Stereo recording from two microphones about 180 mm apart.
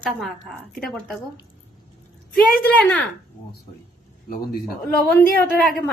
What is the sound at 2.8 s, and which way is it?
Speech, 5° left (ahead or behind).